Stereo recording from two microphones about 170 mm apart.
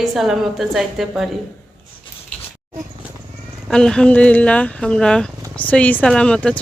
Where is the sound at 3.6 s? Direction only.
5° left (ahead or behind).